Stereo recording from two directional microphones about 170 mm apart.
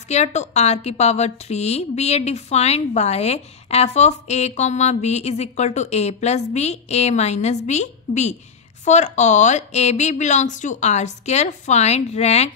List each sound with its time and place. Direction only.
0.1 s a woman's voice: 40° left (ahead or behind)